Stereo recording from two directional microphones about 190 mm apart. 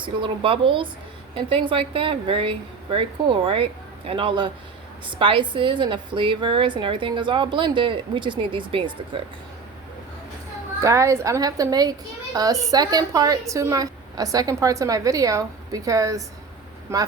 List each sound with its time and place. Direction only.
0.0 s a woman's voice: 25° right (ahead or behind)
10.8 s a woman's voice: 15° right (ahead or behind)